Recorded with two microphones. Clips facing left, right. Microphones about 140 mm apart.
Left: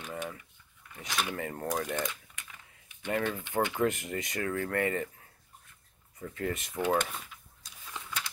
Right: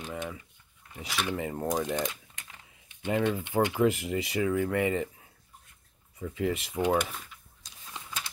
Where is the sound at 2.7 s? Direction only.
20° right (ahead or behind).